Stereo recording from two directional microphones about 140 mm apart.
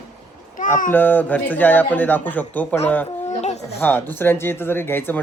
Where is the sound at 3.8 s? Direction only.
15° left (ahead or behind).